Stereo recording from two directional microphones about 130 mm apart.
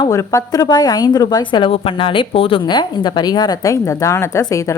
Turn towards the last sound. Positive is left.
turn(degrees=25)  # may be behind; listen again after turning